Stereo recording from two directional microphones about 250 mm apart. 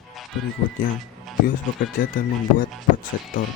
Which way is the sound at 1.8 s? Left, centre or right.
Left.